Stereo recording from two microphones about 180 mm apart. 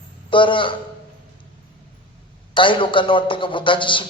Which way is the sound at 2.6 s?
30° left (ahead or behind).